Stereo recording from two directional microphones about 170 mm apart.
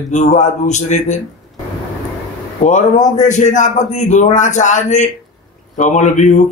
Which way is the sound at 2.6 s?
45° left (ahead or behind).